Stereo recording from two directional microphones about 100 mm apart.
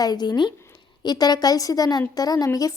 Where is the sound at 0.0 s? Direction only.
45° left (ahead or behind).